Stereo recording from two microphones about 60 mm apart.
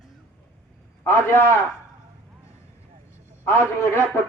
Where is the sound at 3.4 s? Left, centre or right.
Left.